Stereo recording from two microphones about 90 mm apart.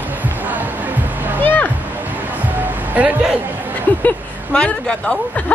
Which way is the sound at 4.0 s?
15° left (ahead or behind).